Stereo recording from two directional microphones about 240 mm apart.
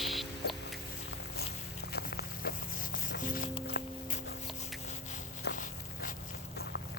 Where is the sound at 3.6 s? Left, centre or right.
Left.